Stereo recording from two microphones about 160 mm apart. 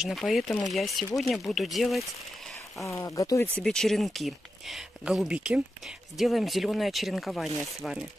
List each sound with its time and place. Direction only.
0.0 s speech: centre (ahead or behind)
2.8 s speech: 20° left (ahead or behind)
3.5 s speech: 5° left (ahead or behind)